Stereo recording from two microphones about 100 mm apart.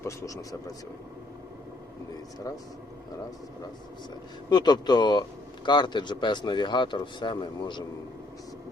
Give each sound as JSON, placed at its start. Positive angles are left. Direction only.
{"t": 4.4, "sound": "speech", "side_deg": 45}